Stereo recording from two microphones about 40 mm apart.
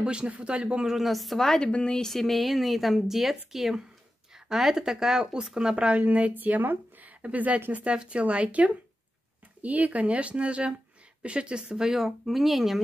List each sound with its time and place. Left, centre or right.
0.0 s speech: right
0.8 s speech: centre
1.7 s speech: left
2.0 s speech: centre; by 5.9 s right
5.9 s speech: right; by 12.8 s centre